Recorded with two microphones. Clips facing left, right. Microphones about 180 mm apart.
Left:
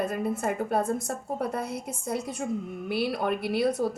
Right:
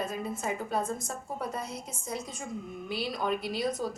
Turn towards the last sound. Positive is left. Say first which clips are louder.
# left 6 dB
turn(degrees=60)  # may be behind; listen again after turning